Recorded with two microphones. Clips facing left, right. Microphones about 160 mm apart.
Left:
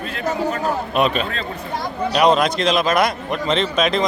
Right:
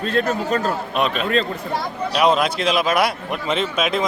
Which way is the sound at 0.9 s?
Centre (ahead or behind).